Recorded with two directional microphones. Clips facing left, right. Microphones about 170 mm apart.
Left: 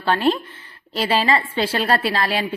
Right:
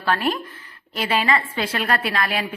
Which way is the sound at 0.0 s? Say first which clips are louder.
Left 4 dB; 25° left (ahead or behind).